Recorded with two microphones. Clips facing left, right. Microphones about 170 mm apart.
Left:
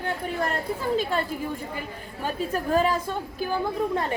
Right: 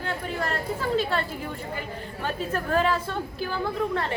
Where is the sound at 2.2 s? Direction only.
10° left (ahead or behind).